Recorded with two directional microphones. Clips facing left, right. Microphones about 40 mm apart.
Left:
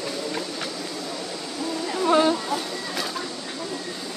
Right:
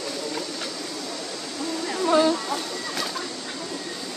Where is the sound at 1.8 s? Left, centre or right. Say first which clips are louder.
Left 1 dB; centre.